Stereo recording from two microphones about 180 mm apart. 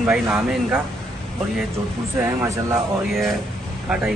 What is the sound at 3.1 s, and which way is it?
Speech, centre (ahead or behind).